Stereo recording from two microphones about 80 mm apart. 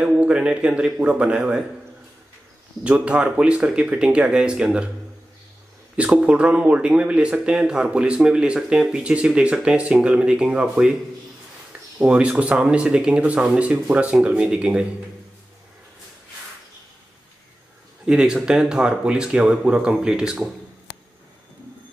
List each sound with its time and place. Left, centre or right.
0.0 s speech: centre
2.8 s speech: centre
5.9 s speech: centre
12.0 s speech: centre
18.0 s speech: centre